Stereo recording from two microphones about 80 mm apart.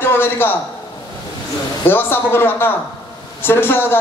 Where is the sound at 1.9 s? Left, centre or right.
Left.